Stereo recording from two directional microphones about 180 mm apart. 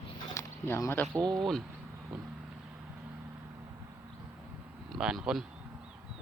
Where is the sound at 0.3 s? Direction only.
15° left (ahead or behind).